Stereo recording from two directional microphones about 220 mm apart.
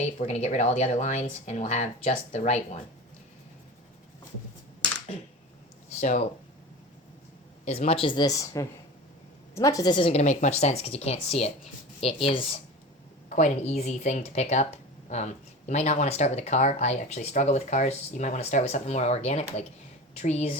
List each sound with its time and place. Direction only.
0.2 s speech: 30° left (ahead or behind)
6.0 s speech: 30° left (ahead or behind)
7.6 s speech: 30° left (ahead or behind)